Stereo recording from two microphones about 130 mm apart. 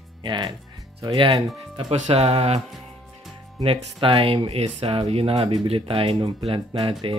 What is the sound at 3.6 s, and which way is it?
Speech, 45° right (ahead or behind).